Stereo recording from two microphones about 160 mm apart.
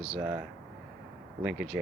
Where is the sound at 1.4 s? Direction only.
5° right (ahead or behind).